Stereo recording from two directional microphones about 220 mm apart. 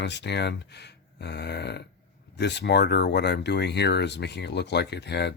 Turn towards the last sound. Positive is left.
turn(degrees=50)  # may be behind; listen again after turning